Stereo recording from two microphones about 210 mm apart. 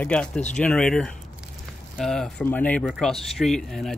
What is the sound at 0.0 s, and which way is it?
Speech, 5° left (ahead or behind).